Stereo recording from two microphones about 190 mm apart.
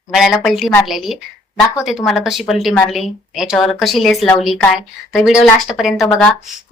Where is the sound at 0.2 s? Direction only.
Centre (ahead or behind).